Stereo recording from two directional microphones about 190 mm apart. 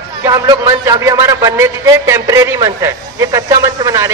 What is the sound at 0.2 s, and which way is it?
A man's voice, 15° right (ahead or behind).